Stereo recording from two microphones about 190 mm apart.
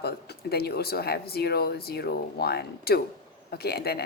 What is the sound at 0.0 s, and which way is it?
Speech, 55° left (ahead or behind).